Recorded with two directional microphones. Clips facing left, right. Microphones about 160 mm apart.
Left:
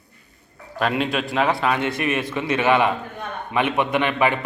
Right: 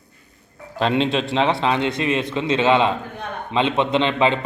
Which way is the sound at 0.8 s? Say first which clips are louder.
Right 3 dB; 25° right (ahead or behind).